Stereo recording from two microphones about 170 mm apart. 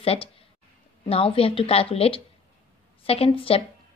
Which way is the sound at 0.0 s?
35° left (ahead or behind).